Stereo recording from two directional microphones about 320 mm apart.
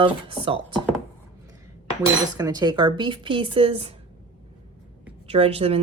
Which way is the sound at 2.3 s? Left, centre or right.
Centre.